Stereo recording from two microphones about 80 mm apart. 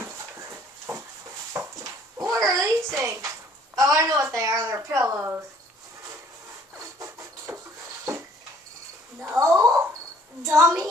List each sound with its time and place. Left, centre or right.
0.0 s dog: right
2.3 s a woman's voice: right
7.0 s a sound: right
9.4 s a woman's voice: right